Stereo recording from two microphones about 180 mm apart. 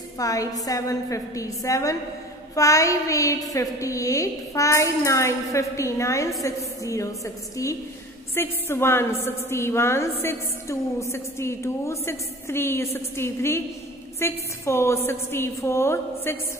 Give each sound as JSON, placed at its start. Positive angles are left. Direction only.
{"t": 0.2, "sound": "a woman's voice", "side_deg": 20}